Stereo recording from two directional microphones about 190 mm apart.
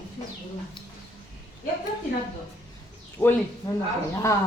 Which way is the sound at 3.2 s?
15° left (ahead or behind).